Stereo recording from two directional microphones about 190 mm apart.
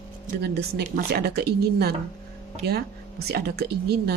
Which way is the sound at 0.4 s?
60° right (ahead or behind).